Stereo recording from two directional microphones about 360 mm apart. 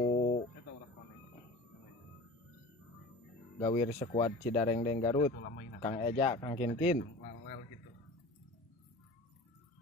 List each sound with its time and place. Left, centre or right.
0.0 s guitar: centre
3.5 s speech: centre